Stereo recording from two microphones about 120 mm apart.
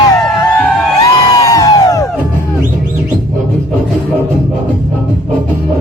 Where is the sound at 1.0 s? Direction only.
30° left (ahead or behind).